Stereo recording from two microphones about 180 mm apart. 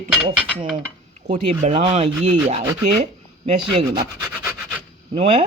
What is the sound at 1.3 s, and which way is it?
Speech, 40° right (ahead or behind).